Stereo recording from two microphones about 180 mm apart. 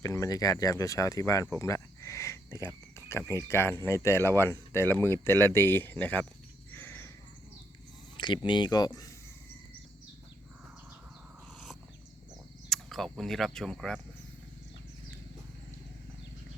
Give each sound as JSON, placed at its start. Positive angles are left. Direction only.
{"t": 0.0, "sound": "speech", "side_deg": 20}
{"t": 6.7, "sound": "a sound", "side_deg": 10}
{"t": 8.1, "sound": "speech", "side_deg": 25}
{"t": 12.6, "sound": "speech", "side_deg": 0}